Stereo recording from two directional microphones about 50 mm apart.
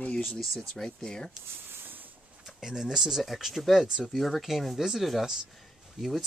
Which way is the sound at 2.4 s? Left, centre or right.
Centre.